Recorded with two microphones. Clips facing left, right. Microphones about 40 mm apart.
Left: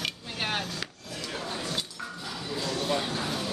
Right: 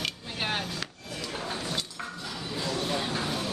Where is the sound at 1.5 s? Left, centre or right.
Centre.